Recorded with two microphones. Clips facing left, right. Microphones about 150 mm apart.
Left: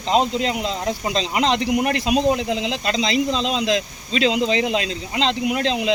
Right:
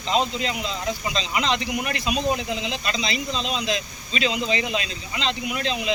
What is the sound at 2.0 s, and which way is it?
Speech, 75° left (ahead or behind).